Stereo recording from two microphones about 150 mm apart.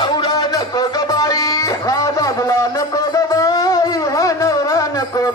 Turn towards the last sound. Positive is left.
turn(degrees=25)  # may be behind; listen again after turning